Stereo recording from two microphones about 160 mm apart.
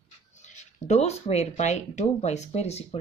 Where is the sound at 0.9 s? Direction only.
45° left (ahead or behind).